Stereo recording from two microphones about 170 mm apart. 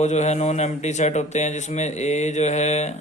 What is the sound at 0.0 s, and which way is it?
A man's voice, 40° left (ahead or behind).